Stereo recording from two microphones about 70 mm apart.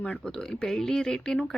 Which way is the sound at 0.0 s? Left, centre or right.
Centre.